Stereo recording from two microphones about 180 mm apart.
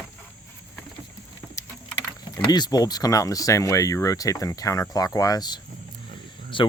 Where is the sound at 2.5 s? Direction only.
20° left (ahead or behind).